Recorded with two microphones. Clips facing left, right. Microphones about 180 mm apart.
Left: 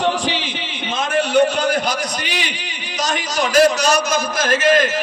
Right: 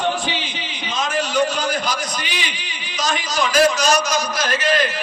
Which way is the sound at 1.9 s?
65° left (ahead or behind).